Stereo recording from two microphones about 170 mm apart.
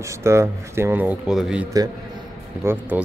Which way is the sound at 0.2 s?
15° right (ahead or behind).